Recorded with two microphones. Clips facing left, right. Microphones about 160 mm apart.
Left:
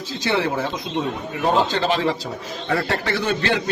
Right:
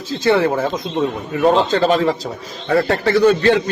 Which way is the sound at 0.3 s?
50° right (ahead or behind).